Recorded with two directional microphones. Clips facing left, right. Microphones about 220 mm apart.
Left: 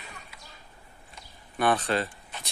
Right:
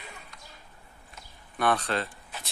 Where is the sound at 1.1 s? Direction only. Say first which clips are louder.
Left 2 dB; centre (ahead or behind).